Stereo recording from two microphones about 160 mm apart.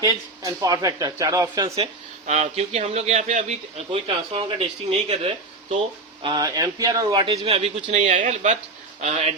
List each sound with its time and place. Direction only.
0.0 s speech: 20° right (ahead or behind)
1.7 s speech: 40° right (ahead or behind)
6.2 s speech: 25° right (ahead or behind); by 9.3 s 45° right (ahead or behind)